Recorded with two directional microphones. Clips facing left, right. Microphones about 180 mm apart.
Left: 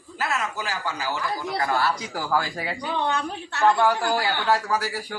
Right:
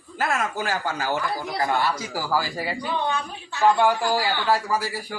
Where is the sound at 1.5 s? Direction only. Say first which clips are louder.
Right 1 dB; 30° right (ahead or behind).